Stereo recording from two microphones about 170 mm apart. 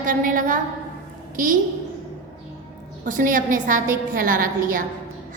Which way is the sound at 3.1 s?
50° right (ahead or behind).